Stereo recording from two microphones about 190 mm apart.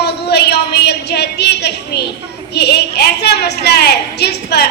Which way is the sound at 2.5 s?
60° left (ahead or behind).